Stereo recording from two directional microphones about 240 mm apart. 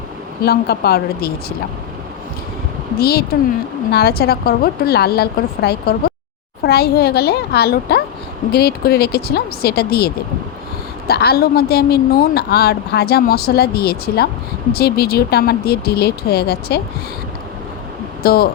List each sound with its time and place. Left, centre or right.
0.4 s a woman's voice: left
3.0 s a woman's voice: left
11.1 s a woman's voice: left
18.2 s speech: left